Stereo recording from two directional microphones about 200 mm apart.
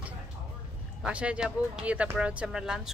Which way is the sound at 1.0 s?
5° right (ahead or behind).